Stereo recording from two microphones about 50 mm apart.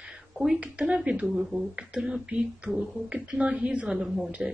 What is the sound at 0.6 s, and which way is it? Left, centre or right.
Speech, right.